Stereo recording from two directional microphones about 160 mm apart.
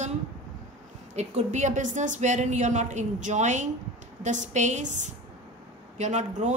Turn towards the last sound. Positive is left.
turn(degrees=-50)  # may be behind; listen again after turning